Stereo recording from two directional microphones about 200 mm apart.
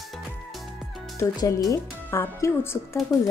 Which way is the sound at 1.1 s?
15° left (ahead or behind).